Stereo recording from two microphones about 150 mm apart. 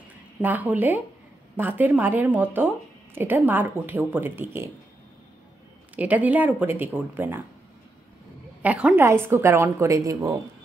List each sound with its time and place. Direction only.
0.4 s speech: 10° right (ahead or behind)
5.9 s speech: 10° right (ahead or behind)
8.6 s a woman's voice: 10° right (ahead or behind)